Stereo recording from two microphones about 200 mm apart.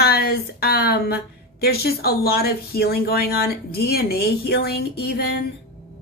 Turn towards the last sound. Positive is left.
turn(degrees=55)  # may be behind; listen again after turning